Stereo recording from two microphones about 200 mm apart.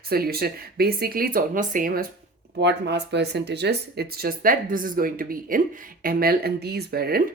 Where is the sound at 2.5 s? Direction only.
55° right (ahead or behind).